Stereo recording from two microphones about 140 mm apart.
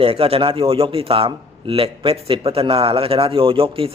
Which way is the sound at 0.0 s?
45° right (ahead or behind).